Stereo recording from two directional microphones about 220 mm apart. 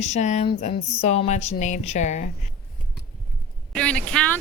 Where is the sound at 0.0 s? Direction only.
30° left (ahead or behind).